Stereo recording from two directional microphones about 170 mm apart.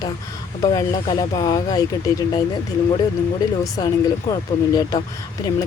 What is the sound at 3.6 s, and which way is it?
Speech, 20° left (ahead or behind).